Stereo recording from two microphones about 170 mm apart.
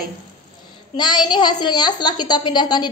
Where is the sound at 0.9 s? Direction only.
25° left (ahead or behind).